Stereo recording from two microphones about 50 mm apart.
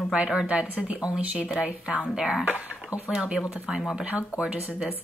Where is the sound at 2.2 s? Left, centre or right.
Centre.